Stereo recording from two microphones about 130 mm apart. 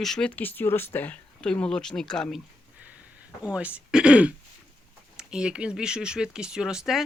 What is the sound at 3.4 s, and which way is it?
Speech, 10° right (ahead or behind).